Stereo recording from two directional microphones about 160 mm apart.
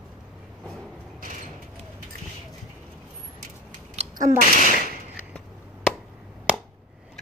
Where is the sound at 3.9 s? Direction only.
45° right (ahead or behind).